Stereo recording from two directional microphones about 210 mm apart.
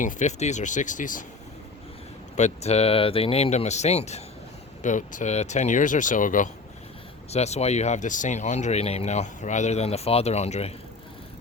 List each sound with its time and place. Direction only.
0.0 s speech: 35° left (ahead or behind)
2.3 s speech: 30° left (ahead or behind)